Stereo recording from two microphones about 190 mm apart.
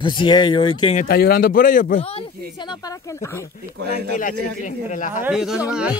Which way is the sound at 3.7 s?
60° right (ahead or behind).